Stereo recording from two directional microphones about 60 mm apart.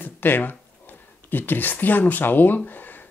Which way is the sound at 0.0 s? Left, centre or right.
Left.